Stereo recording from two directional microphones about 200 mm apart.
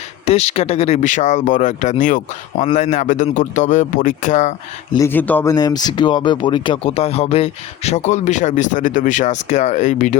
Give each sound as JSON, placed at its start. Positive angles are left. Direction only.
{"t": 0.3, "sound": "speech", "side_deg": 30}
{"t": 4.9, "sound": "speech", "side_deg": 10}